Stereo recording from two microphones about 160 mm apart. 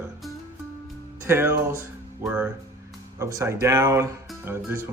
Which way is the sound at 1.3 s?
15° right (ahead or behind).